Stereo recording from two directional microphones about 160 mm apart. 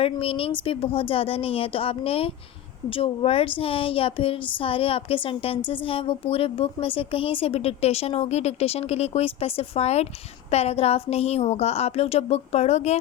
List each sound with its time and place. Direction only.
0.0 s speech: 35° left (ahead or behind)